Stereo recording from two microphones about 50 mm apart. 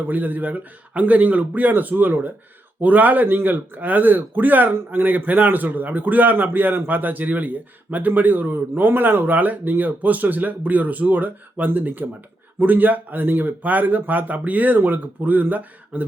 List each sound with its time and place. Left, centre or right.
0.1 s speech: right